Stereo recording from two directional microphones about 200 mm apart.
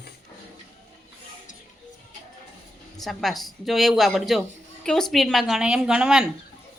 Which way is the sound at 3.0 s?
Centre (ahead or behind).